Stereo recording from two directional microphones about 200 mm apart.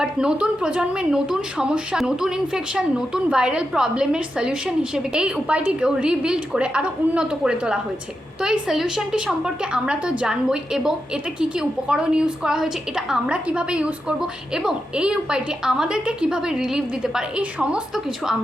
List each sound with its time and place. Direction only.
0.0 s a woman's voice: 5° right (ahead or behind)